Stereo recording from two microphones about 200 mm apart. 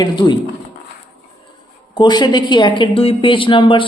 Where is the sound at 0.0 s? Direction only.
20° left (ahead or behind).